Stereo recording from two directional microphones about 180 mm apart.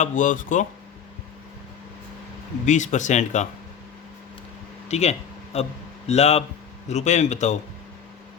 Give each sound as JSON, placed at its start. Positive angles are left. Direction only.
{"t": 0.0, "sound": "speech", "side_deg": 45}
{"t": 2.6, "sound": "speech", "side_deg": 40}
{"t": 4.9, "sound": "speech", "side_deg": 35}